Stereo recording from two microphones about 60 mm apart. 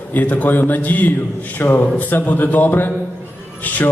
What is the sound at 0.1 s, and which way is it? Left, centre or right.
A man's voice, left.